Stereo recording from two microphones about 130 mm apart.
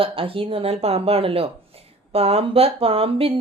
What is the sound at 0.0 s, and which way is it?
Speech, 45° right (ahead or behind).